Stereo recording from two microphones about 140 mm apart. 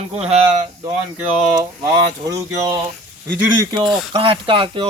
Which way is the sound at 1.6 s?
25° right (ahead or behind).